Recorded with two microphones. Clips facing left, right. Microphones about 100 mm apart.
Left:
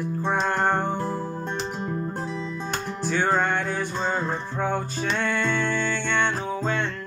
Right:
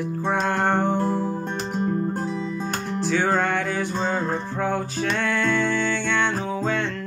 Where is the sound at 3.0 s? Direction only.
90° right.